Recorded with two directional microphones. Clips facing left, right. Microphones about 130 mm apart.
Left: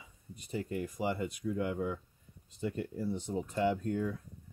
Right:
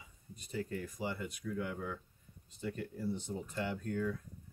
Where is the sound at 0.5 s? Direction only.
20° left (ahead or behind).